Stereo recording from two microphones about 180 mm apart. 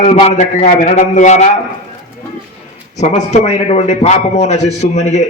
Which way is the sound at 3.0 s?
35° left (ahead or behind).